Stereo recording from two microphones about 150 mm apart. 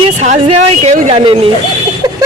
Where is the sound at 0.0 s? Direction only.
45° right (ahead or behind).